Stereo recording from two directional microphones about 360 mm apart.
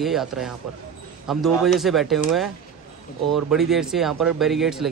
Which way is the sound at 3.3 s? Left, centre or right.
Centre.